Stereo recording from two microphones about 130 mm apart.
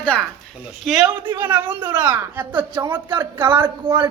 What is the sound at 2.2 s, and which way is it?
A woman's voice, 15° right (ahead or behind).